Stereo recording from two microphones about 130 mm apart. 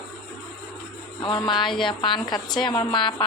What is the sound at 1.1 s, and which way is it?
A woman's voice, 40° left (ahead or behind).